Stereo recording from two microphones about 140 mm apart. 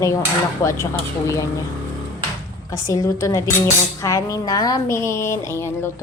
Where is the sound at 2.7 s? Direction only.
25° left (ahead or behind).